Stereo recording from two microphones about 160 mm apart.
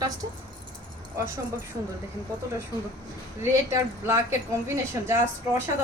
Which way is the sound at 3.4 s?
15° right (ahead or behind).